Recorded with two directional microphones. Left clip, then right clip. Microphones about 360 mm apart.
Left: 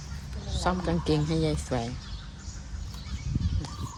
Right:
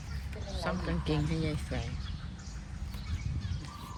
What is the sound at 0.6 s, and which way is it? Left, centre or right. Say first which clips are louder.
Speech: left 7 dB; centre.